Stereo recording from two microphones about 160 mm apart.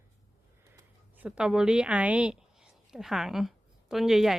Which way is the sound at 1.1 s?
10° right (ahead or behind).